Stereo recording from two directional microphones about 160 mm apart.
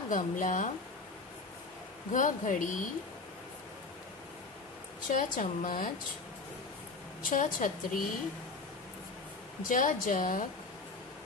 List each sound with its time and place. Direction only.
0.1 s a woman's voice: 55° left (ahead or behind)
2.1 s a woman's voice: 55° left (ahead or behind)
5.1 s a woman's voice: 55° left (ahead or behind)
7.2 s a woman's voice: 55° left (ahead or behind)
9.6 s a woman's voice: 60° left (ahead or behind)